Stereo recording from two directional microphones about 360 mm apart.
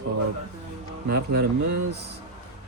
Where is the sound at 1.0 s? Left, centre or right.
Right.